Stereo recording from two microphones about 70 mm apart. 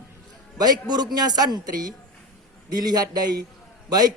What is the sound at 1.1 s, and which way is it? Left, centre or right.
A woman's voice, right.